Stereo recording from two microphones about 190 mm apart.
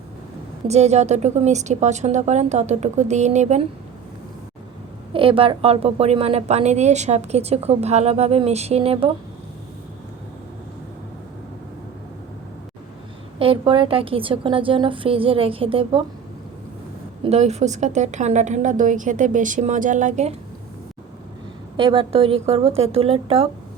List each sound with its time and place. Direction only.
0.7 s a woman's voice: 35° right (ahead or behind)
5.1 s a woman's voice: 30° right (ahead or behind)
13.4 s a woman's voice: 25° right (ahead or behind)
17.2 s a woman's voice: 35° right (ahead or behind)
21.8 s a woman's voice: 25° right (ahead or behind)